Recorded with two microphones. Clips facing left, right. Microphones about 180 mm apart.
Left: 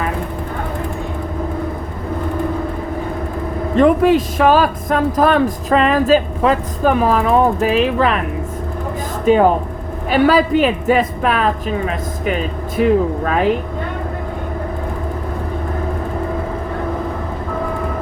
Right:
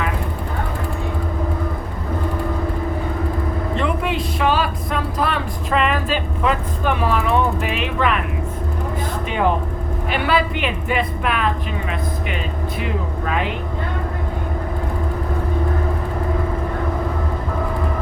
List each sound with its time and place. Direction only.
3.8 s speech: 45° left (ahead or behind)
9.2 s speech: 40° left (ahead or behind)